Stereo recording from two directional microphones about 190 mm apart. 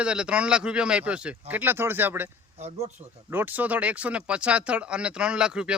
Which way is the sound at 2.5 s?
35° right (ahead or behind).